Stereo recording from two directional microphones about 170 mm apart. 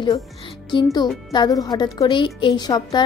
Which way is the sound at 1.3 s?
25° left (ahead or behind).